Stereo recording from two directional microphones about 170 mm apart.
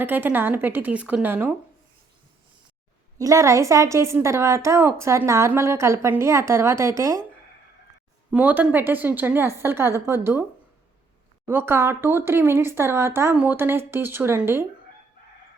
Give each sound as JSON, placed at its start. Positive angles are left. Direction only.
{"t": 0.0, "sound": "a woman's voice", "side_deg": -10}
{"t": 3.2, "sound": "a woman's voice", "side_deg": -20}
{"t": 8.3, "sound": "a woman's voice", "side_deg": -10}
{"t": 11.4, "sound": "a woman's voice", "side_deg": -15}